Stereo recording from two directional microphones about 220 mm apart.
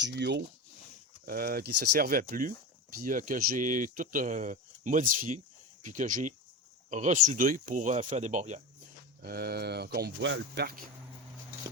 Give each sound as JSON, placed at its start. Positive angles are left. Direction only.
{"t": 0.0, "sound": "speech", "side_deg": -50}
{"t": 9.2, "sound": "speech", "side_deg": -45}